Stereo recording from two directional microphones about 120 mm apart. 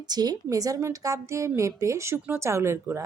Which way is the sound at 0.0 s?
35° right (ahead or behind).